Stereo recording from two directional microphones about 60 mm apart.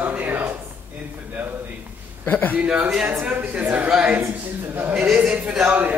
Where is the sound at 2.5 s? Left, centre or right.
Right.